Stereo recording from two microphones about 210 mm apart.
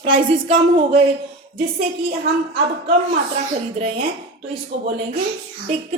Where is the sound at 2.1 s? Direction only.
50° right (ahead or behind).